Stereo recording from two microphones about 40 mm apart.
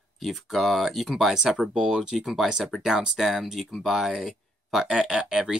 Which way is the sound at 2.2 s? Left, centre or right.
Centre.